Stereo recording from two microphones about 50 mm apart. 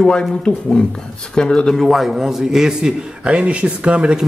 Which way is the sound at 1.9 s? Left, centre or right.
Centre.